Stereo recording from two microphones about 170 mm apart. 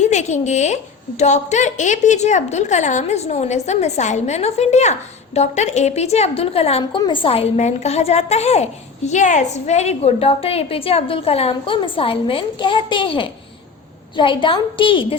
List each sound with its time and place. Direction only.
0.1 s a woman's voice: 45° left (ahead or behind)